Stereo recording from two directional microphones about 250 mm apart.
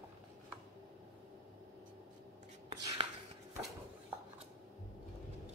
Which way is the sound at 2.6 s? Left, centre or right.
Right.